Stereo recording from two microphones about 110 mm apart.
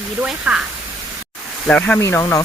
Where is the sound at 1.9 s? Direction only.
25° left (ahead or behind).